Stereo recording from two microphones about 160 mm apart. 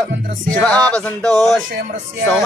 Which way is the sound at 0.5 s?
5° left (ahead or behind).